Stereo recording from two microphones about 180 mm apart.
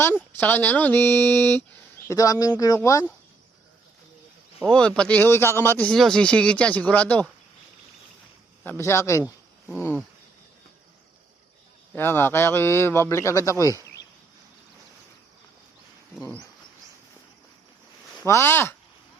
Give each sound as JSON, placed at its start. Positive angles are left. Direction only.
{"t": 0.0, "sound": "speech", "side_deg": 10}
{"t": 4.6, "sound": "speech", "side_deg": 5}
{"t": 8.6, "sound": "speech", "side_deg": 15}
{"t": 9.2, "sound": "a sound", "side_deg": -5}
{"t": 11.9, "sound": "speech", "side_deg": 10}
{"t": 16.1, "sound": "speech", "side_deg": 10}
{"t": 18.3, "sound": "speech", "side_deg": 15}